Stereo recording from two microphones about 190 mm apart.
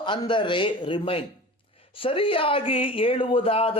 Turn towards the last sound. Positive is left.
turn(degrees=30)  # may be behind; listen again after turning